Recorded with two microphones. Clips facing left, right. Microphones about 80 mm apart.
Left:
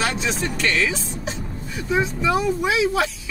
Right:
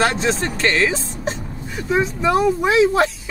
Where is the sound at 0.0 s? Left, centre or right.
Right.